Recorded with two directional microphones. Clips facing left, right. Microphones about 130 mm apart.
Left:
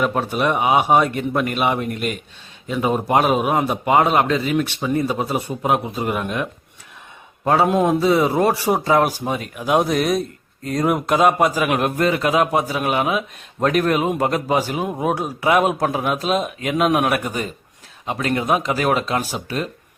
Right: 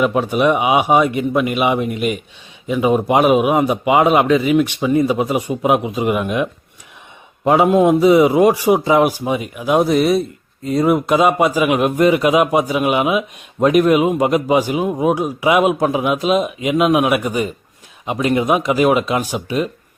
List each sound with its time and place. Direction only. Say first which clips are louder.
0.0 s a man's voice: right 5 dB; 10° right (ahead or behind)